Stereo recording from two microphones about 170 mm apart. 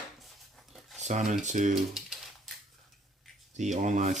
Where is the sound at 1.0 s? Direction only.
45° right (ahead or behind).